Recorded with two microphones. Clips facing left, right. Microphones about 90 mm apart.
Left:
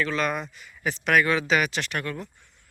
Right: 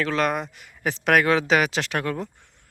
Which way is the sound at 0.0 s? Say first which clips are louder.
Right 3 dB; 70° right (ahead or behind).